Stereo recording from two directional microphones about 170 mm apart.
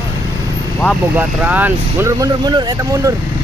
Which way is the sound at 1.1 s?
10° right (ahead or behind).